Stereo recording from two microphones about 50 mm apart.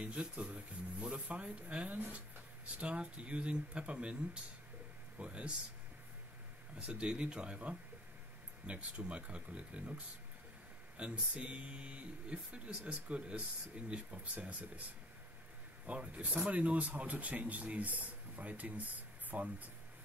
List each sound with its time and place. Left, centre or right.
0.0 s speech: right
2.0 s speech: right
2.8 s speech: right
6.9 s speech: right
15.9 s speech: right